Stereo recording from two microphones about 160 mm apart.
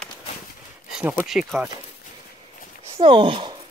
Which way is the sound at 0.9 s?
5° right (ahead or behind).